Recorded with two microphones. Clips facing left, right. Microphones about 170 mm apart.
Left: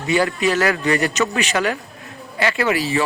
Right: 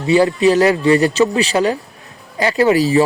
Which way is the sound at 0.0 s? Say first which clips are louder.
Right 6 dB; 30° right (ahead or behind).